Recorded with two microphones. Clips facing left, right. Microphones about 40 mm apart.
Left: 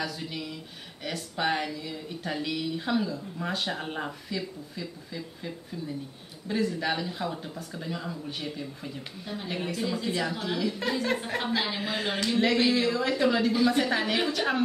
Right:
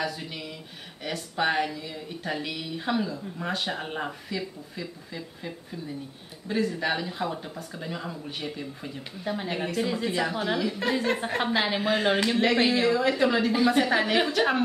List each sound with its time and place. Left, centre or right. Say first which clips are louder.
0.0 s speech: right 2 dB; centre
11.8 s a woman's voice: right 6 dB; centre
13.7 s speech: right 3 dB; centre